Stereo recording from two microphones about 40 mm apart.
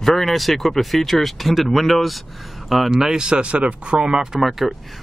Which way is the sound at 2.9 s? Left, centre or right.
Centre.